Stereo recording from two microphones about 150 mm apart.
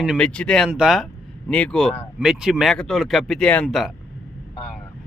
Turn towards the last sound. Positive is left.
turn(degrees=0)  # may be behind; listen again after turning